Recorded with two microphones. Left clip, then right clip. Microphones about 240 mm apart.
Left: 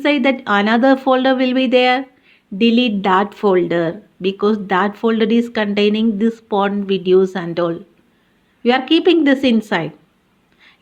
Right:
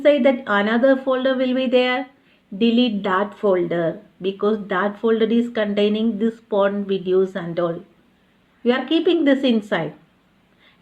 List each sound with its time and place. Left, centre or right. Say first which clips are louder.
0.0 s speech: even; left